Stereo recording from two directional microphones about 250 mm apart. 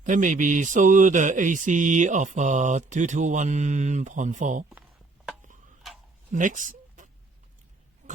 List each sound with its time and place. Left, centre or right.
0.0 s speech: right
6.3 s a sound: right
8.0 s oink: right